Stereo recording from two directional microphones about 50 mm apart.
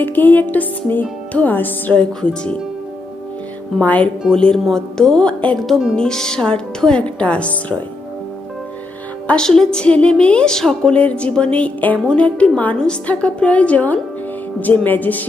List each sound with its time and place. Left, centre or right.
0.0 s music: left
1.9 s a woman's voice: left
3.8 s music: left
4.3 s a woman's voice: centre
7.0 s a woman's voice: left
9.2 s a woman's voice: centre
10.9 s a woman's voice: left
14.6 s music: left